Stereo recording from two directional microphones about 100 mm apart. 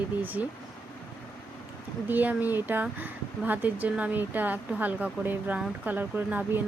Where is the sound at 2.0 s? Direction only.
15° right (ahead or behind).